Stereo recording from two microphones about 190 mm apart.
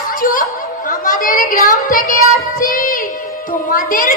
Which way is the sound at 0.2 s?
45° left (ahead or behind).